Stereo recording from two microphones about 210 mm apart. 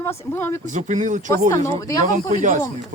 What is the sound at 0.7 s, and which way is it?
Speech, 35° right (ahead or behind).